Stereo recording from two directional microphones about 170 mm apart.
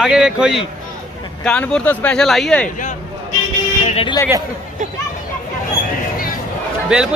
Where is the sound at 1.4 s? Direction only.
5° left (ahead or behind).